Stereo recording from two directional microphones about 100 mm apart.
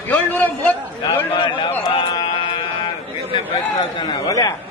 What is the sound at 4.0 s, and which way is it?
Speech, 50° left (ahead or behind).